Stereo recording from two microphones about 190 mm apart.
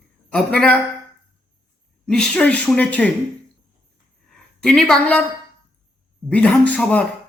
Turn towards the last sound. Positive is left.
turn(degrees=5)  # may be behind; listen again after turning